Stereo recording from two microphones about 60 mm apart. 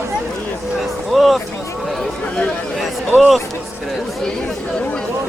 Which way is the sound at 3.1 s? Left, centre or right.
Left.